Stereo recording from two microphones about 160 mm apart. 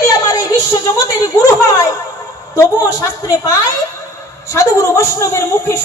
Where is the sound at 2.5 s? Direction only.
20° left (ahead or behind).